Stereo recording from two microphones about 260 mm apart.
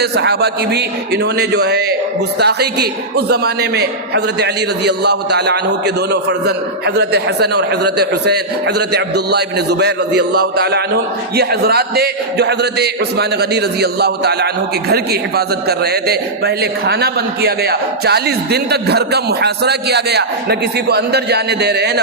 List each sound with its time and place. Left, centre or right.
0.0 s a man's voice: right